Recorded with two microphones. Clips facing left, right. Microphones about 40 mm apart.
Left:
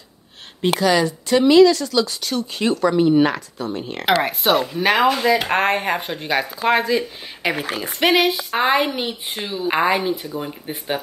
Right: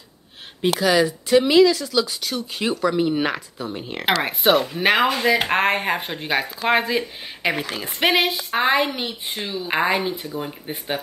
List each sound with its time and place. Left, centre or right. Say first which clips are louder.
0.6 s speech: left 1 dB; centre
4.6 s speech: left 1 dB; right
5.5 s speech: left 1 dB; centre
7.4 s speech: left 1 dB; centre
8.9 s speech: left 2 dB; centre